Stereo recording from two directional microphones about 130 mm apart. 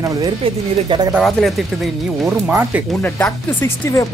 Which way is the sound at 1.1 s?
Centre (ahead or behind).